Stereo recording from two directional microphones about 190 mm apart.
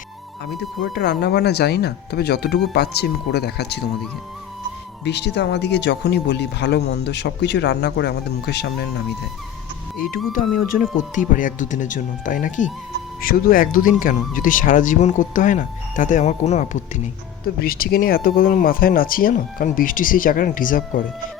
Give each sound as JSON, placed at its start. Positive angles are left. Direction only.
{"t": 0.9, "sound": "speech", "side_deg": 60}
{"t": 5.0, "sound": "speech", "side_deg": 65}
{"t": 10.3, "sound": "speech", "side_deg": 45}
{"t": 17.4, "sound": "speech", "side_deg": 50}